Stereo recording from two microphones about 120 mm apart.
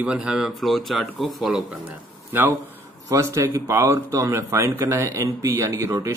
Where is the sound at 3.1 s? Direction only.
25° right (ahead or behind).